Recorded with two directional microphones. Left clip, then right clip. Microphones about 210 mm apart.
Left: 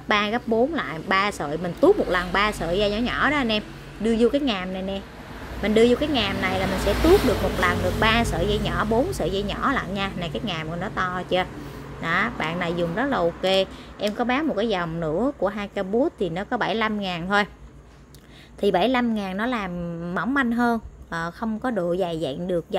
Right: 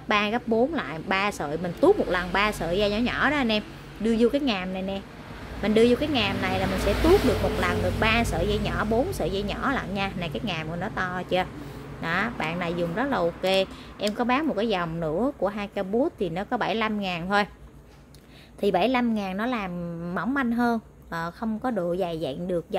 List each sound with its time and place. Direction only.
0.1 s speech: 5° left (ahead or behind)
7.6 s a woman's voice: 10° left (ahead or behind)
18.6 s a woman's voice: 5° left (ahead or behind)